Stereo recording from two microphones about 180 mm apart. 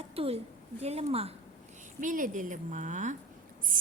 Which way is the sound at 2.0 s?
45° right (ahead or behind).